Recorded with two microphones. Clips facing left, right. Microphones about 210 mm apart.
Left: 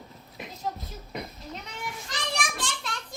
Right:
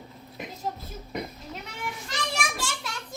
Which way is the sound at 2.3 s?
5° right (ahead or behind).